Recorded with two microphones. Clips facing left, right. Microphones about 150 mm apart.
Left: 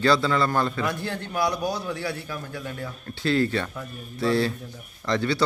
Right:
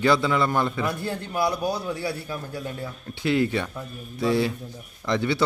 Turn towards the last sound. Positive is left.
turn(degrees=-20)  # may be behind; listen again after turning